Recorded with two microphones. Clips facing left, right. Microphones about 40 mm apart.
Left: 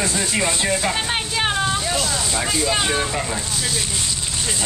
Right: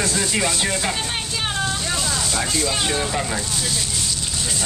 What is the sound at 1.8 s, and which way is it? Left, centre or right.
Speech, centre.